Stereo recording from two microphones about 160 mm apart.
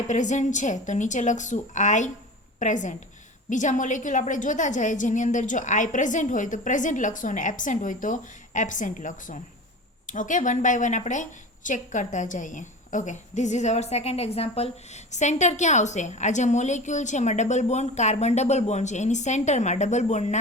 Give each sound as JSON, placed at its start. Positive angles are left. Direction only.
{"t": 0.1, "sound": "a woman's voice", "side_deg": 50}